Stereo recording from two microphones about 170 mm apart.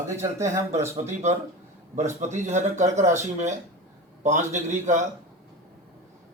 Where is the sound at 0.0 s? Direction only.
15° right (ahead or behind).